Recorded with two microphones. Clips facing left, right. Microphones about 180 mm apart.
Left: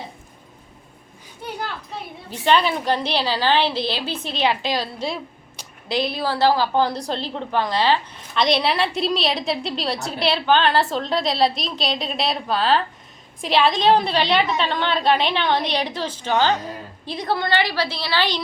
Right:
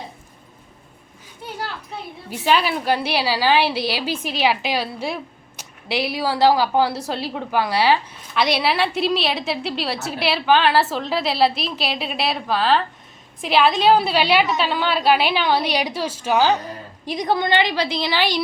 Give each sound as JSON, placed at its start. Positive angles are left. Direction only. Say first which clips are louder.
{"t": 2.3, "sound": "a woman's voice", "louder": "left 1 dB", "side_deg": -5}